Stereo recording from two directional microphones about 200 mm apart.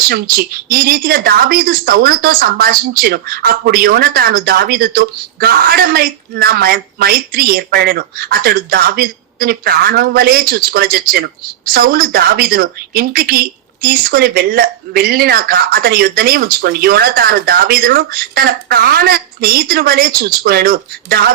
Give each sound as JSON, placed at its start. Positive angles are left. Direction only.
{"t": 0.1, "sound": "a woman's voice", "side_deg": -50}